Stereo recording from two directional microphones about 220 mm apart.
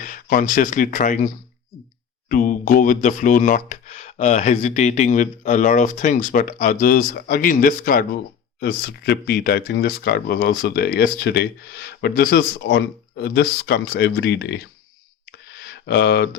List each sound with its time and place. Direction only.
0.0 s speech: 40° left (ahead or behind)
2.3 s speech: 40° left (ahead or behind)
15.3 s a sound: 50° left (ahead or behind)